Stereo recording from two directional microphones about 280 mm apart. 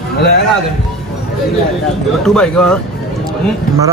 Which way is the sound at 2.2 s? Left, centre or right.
Centre.